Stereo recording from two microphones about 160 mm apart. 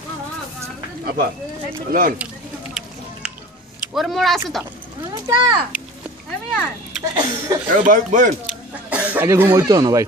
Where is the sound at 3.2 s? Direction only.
10° right (ahead or behind).